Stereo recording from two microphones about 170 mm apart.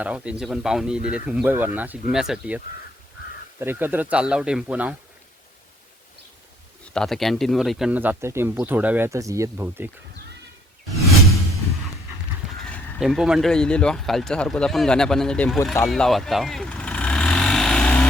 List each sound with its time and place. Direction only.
0.0 s speech: 5° right (ahead or behind)
3.6 s speech: 10° right (ahead or behind)
6.9 s speech: 5° left (ahead or behind); by 9.9 s 15° right (ahead or behind)
12.6 s speech: centre (ahead or behind)
15.9 s vehicle: centre (ahead or behind)